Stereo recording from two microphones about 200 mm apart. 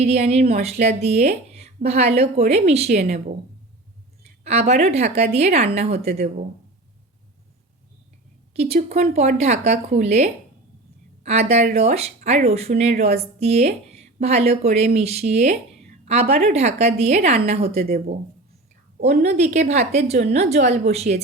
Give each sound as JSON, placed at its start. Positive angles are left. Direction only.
{"t": 0.0, "sound": "a woman's voice", "side_deg": -30}
{"t": 4.4, "sound": "a woman's voice", "side_deg": -35}
{"t": 8.5, "sound": "a woman's voice", "side_deg": -30}
{"t": 17.8, "sound": "speech", "side_deg": -50}
{"t": 19.2, "sound": "a woman's voice", "side_deg": -35}